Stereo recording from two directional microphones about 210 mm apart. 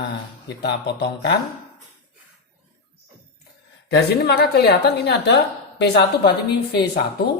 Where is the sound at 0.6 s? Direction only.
50° left (ahead or behind).